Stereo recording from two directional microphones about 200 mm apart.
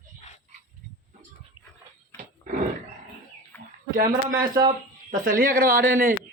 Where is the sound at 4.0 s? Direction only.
45° right (ahead or behind).